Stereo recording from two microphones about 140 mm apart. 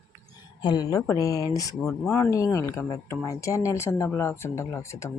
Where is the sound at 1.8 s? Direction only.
Centre (ahead or behind).